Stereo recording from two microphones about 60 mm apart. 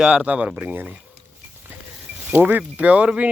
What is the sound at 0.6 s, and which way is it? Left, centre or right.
Speech, right.